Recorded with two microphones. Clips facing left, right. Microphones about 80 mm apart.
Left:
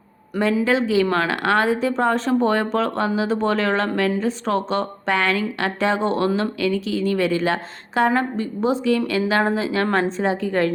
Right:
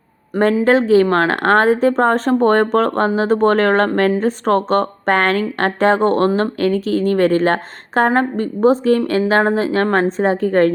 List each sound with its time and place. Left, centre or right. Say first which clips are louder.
0.6 s a woman's voice: right 8 dB; right